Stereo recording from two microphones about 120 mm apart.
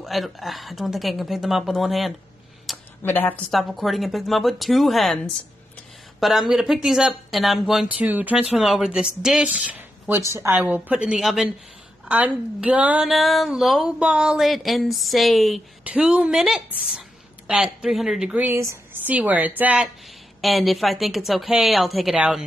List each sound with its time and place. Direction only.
0.0 s speech: centre (ahead or behind)
3.0 s a woman's voice: 15° left (ahead or behind)
3.4 s speech: centre (ahead or behind)
8.5 s a woman's voice: centre (ahead or behind)
13.1 s a woman's voice: centre (ahead or behind)
20.4 s speech: centre (ahead or behind)